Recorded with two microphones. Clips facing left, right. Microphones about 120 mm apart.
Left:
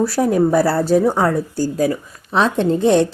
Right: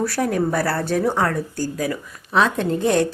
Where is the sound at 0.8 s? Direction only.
10° left (ahead or behind).